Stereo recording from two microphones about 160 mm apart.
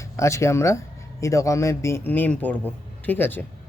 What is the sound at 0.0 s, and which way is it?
A man's voice, 20° left (ahead or behind).